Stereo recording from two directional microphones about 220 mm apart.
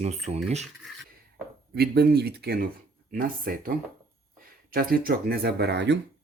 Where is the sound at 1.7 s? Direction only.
45° right (ahead or behind).